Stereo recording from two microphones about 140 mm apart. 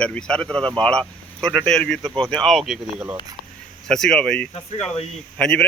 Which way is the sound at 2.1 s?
30° right (ahead or behind).